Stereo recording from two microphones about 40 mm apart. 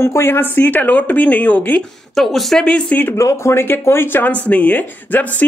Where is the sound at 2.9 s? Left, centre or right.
Left.